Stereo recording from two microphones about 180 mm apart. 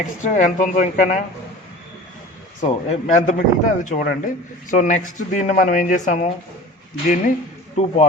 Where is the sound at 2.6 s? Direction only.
40° left (ahead or behind).